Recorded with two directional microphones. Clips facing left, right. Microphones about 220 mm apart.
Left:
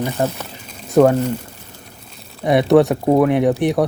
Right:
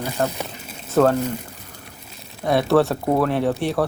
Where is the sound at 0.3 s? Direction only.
5° right (ahead or behind).